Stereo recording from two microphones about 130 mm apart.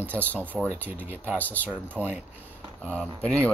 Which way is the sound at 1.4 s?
10° left (ahead or behind).